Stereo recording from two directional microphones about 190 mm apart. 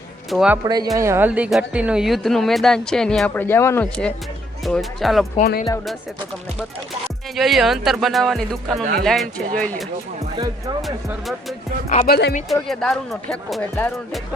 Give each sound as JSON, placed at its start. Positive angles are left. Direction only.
{"t": 0.3, "sound": "speech", "side_deg": -5}
{"t": 0.6, "sound": "speech", "side_deg": -20}
{"t": 5.4, "sound": "speech", "side_deg": 50}
{"t": 7.3, "sound": "speech", "side_deg": 0}
{"t": 8.8, "sound": "speech", "side_deg": -50}
{"t": 9.0, "sound": "speech", "side_deg": 5}
{"t": 12.0, "sound": "speech", "side_deg": 55}
{"t": 12.6, "sound": "speech", "side_deg": 5}